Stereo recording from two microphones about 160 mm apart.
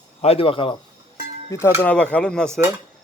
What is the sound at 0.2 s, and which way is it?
Speech, 35° left (ahead or behind).